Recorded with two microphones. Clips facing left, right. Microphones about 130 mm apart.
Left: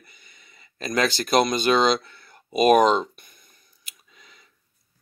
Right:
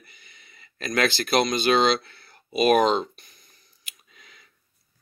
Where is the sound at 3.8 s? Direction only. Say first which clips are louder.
Even; 40° left (ahead or behind).